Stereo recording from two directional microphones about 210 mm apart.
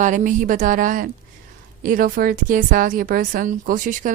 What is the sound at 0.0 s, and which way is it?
A woman's voice, 35° right (ahead or behind).